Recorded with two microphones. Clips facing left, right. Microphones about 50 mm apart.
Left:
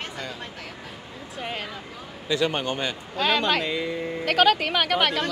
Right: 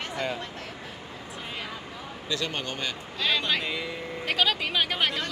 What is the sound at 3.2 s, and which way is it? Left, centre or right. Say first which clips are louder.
Speech: left 5 dB; left.